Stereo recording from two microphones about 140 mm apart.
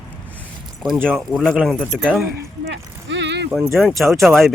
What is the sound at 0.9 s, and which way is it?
Speech, 5° left (ahead or behind).